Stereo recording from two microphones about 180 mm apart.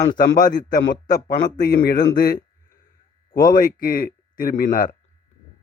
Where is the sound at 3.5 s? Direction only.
50° left (ahead or behind).